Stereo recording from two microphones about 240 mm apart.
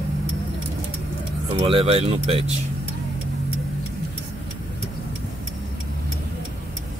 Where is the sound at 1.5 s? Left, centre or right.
Right.